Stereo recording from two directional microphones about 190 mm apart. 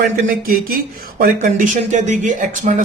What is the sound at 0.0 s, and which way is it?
Speech, 50° right (ahead or behind).